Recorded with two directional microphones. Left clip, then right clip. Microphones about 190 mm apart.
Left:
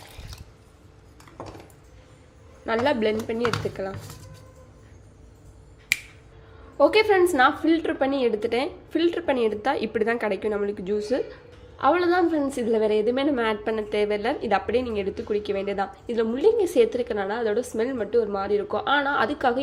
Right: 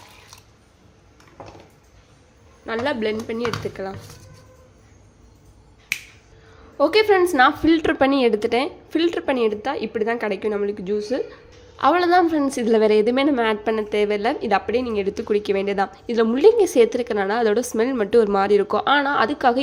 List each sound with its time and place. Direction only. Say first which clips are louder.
2.6 s a woman's voice: left 1 dB; centre (ahead or behind)
6.7 s a woman's voice: right 2 dB; 15° right (ahead or behind)